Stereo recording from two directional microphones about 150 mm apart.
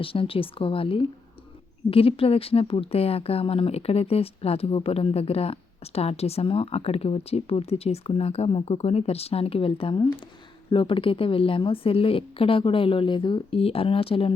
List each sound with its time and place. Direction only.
0.0 s speech: 40° left (ahead or behind)